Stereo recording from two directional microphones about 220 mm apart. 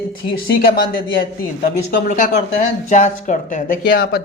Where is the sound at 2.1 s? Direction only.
35° left (ahead or behind).